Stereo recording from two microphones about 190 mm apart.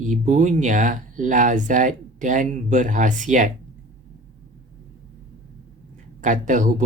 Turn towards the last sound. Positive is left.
turn(degrees=-40)  # may be behind; listen again after turning